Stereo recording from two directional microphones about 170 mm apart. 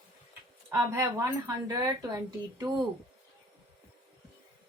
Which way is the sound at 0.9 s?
15° right (ahead or behind).